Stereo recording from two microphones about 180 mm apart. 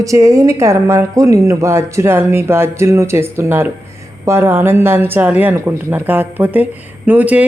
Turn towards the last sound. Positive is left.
turn(degrees=-10)  # may be behind; listen again after turning